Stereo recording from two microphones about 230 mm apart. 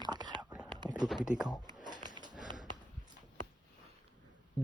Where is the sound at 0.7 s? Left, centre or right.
Centre.